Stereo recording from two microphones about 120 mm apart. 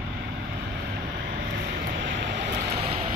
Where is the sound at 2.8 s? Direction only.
65° right (ahead or behind).